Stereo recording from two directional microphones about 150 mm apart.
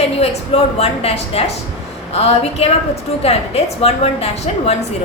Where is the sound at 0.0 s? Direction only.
45° left (ahead or behind).